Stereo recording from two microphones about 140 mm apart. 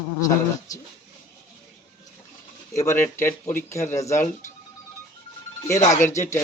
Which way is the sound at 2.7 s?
20° left (ahead or behind).